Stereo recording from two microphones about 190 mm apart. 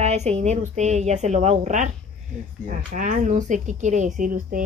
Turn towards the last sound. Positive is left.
turn(degrees=-45)  # may be behind; listen again after turning